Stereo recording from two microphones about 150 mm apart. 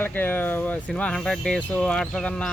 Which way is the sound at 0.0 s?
10° left (ahead or behind).